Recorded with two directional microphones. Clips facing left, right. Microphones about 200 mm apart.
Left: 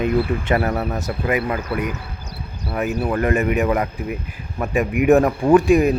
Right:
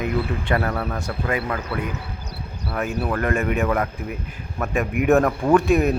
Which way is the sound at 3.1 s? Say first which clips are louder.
Left 4 dB; 15° left (ahead or behind).